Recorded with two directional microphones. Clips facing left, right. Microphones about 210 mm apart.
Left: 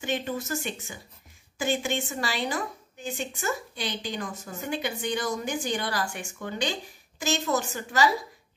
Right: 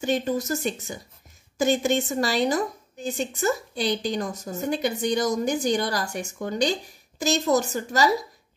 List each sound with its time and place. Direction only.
0.0 s speech: 40° right (ahead or behind)